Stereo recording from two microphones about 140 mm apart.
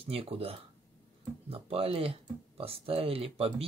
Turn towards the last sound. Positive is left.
turn(degrees=-45)  # may be behind; listen again after turning